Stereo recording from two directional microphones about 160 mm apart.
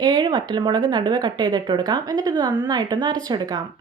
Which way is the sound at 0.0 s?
30° right (ahead or behind).